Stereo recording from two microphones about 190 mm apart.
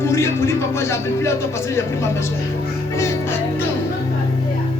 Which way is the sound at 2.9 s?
15° left (ahead or behind).